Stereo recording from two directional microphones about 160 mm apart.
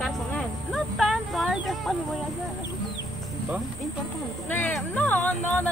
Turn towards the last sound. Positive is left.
turn(degrees=10)  # may be behind; listen again after turning